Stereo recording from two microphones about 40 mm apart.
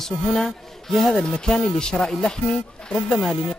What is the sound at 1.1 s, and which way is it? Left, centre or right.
Speech, centre.